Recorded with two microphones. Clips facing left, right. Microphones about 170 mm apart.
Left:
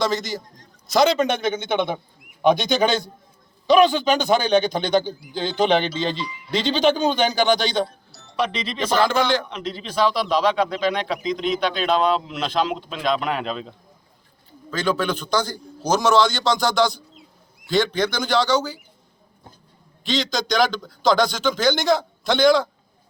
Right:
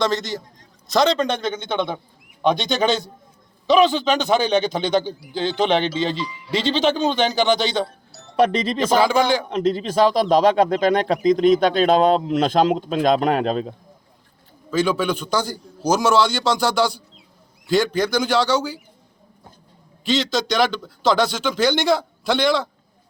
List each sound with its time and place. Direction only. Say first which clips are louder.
0.0 s a man's voice: right 1 dB; centre (ahead or behind)
8.4 s speech: right 6 dB; 45° right (ahead or behind)
9.0 s a man's voice: right 1 dB; 10° right (ahead or behind)
9.5 s speech: right 10 dB; 45° right (ahead or behind)
14.7 s a man's voice: right 3 dB; 5° right (ahead or behind)
20.1 s speech: right 3 dB; 5° right (ahead or behind)